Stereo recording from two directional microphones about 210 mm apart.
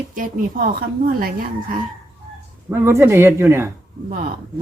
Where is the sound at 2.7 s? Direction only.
10° right (ahead or behind).